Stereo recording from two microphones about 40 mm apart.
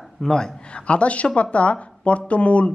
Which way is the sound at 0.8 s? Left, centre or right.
Left.